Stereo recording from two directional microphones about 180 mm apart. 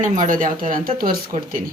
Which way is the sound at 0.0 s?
45° right (ahead or behind).